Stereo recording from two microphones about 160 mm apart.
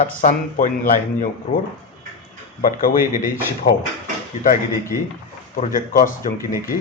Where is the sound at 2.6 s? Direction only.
60° left (ahead or behind).